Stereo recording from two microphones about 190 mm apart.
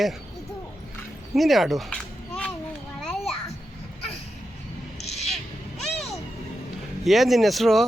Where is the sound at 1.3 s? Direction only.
Centre (ahead or behind).